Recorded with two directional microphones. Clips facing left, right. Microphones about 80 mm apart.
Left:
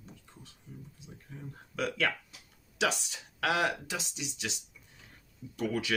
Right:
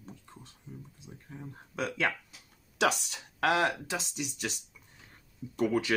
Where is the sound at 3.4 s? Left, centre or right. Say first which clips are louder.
Right 2 dB; right.